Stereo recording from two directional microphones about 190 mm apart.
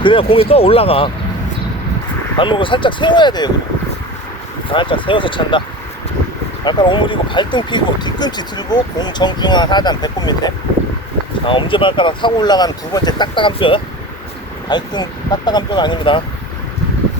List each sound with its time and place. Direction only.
0.0 s speech: 25° left (ahead or behind)
2.4 s speech: 25° left (ahead or behind)
4.7 s speech: 25° left (ahead or behind)
6.7 s speech: 25° left (ahead or behind)